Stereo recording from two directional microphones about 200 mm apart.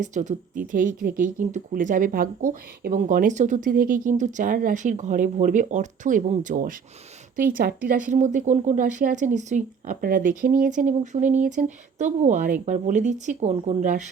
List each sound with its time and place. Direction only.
0.0 s speech: 35° right (ahead or behind)